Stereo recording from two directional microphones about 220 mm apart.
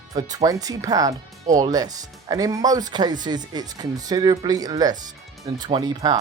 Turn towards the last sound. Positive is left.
turn(degrees=-20)  # may be behind; listen again after turning